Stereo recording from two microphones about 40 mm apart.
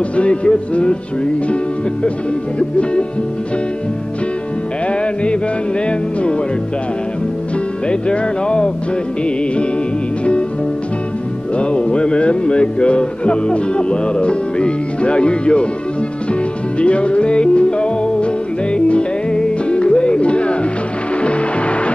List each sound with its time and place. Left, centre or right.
0.1 s music: left
2.8 s music: left
7.9 s music: left
11.5 s music: left
16.8 s music: left